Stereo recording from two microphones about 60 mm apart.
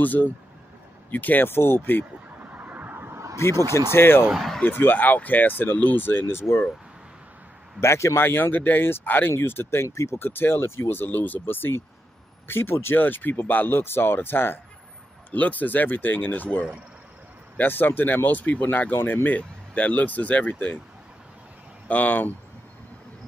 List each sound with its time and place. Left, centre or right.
0.0 s speech: left
2.5 s vehicle: right
3.6 s speech: left
4.3 s speech: centre
4.6 s speech: left
7.8 s speech: left
8.2 s speech: left
9.8 s speech: left
10.1 s speech: left
15.3 s speech: left
21.8 s speech: left